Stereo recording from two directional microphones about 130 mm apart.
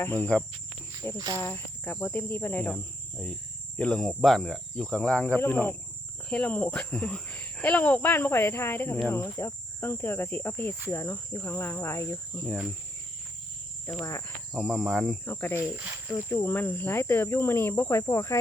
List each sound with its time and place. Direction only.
0.0 s speech: 15° left (ahead or behind)
1.1 s speech: 30° right (ahead or behind)
1.4 s speech: 15° left (ahead or behind)
2.7 s cricket: centre (ahead or behind)
3.8 s speech: 5° left (ahead or behind)
9.0 s cricket: 20° left (ahead or behind)
14.0 s cricket: 25° left (ahead or behind)
14.5 s cricket: centre (ahead or behind)
15.2 s speech: 15° left (ahead or behind)
15.7 s speech: 10° right (ahead or behind)
16.1 s speech: 15° left (ahead or behind)